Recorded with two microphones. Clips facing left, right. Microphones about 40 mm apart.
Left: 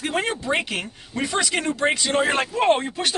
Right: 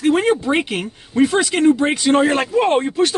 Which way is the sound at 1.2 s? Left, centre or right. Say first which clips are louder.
Right 9 dB; centre.